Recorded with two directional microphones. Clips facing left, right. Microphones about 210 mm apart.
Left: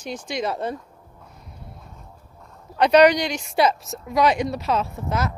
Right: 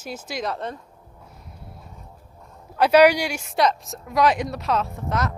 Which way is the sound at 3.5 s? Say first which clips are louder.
Left 1 dB; 5° left (ahead or behind).